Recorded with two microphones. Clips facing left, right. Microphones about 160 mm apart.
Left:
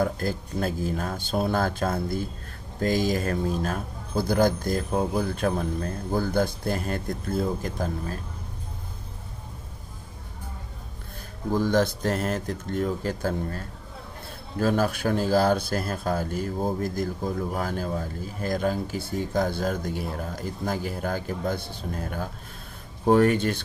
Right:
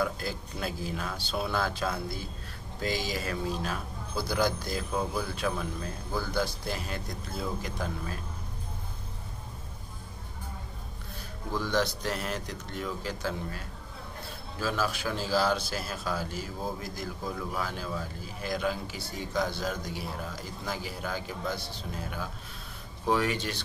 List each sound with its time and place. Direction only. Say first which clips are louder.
0.0 s speech: left 5 dB; 45° left (ahead or behind)
11.5 s speech: left 6 dB; 50° left (ahead or behind)